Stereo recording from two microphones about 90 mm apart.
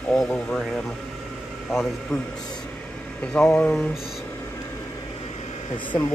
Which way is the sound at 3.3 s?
10° left (ahead or behind).